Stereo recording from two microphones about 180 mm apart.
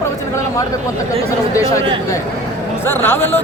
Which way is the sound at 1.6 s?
20° left (ahead or behind).